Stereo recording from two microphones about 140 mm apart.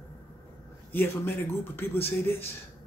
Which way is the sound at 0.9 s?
15° left (ahead or behind).